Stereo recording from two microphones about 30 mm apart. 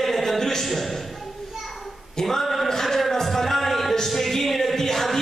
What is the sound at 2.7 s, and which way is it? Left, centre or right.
Music, centre.